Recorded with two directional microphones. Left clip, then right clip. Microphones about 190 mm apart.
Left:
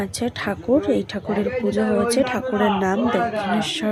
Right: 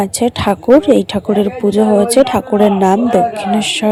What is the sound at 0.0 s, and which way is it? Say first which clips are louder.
Speech: right 11 dB; 35° right (ahead or behind).